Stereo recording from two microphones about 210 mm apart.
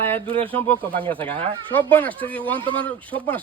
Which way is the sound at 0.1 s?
25° right (ahead or behind).